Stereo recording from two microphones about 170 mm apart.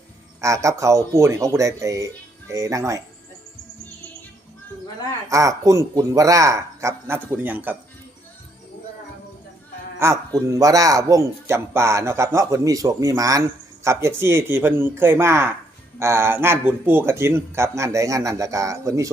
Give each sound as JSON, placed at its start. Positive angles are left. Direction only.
{"t": 0.4, "sound": "speech", "side_deg": -20}
{"t": 5.3, "sound": "speech", "side_deg": -20}
{"t": 10.0, "sound": "speech", "side_deg": -15}